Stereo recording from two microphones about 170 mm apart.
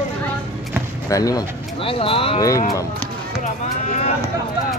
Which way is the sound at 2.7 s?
20° left (ahead or behind).